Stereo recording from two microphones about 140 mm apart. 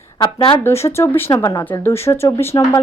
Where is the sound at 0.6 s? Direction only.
20° left (ahead or behind).